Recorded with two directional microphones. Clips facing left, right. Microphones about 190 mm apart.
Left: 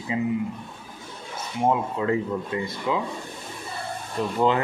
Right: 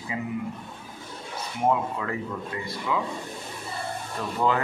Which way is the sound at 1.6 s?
25° left (ahead or behind).